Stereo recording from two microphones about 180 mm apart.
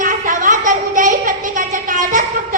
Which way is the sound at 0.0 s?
45° right (ahead or behind).